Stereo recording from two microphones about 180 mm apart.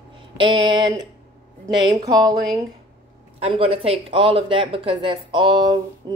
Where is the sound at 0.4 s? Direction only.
25° right (ahead or behind).